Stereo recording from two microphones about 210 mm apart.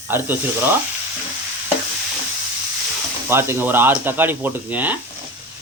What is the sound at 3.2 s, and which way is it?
A man's voice, 10° right (ahead or behind).